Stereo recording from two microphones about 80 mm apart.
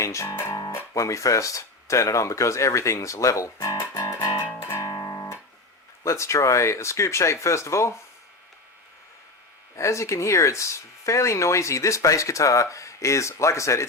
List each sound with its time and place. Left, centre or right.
0.0 s music: left
0.7 s speech: left
4.8 s music: left
6.0 s speech: left
9.7 s speech: left